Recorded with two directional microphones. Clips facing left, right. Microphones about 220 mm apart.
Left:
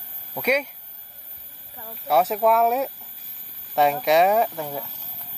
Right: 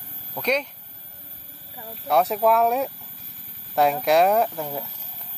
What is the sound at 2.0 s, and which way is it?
Speech, centre (ahead or behind).